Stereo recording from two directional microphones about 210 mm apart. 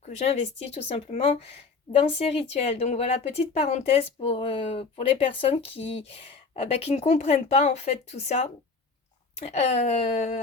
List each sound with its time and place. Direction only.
0.0 s speech: 30° left (ahead or behind)